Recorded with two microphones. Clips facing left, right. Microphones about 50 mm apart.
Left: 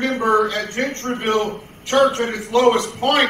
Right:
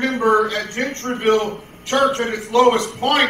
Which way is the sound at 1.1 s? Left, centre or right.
Centre.